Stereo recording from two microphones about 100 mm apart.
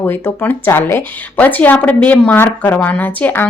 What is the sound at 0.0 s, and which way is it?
Speech, 20° left (ahead or behind).